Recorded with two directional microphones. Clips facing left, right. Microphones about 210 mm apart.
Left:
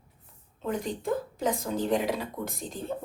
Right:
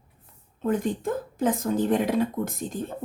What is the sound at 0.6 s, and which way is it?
Speech, 50° right (ahead or behind).